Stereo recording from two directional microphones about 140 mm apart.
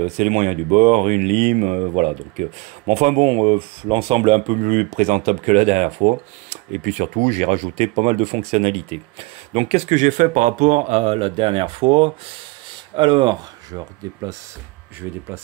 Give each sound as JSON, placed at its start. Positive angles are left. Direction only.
{"t": 0.0, "sound": "speech", "side_deg": -60}
{"t": 4.9, "sound": "speech", "side_deg": -65}
{"t": 15.0, "sound": "speech", "side_deg": -20}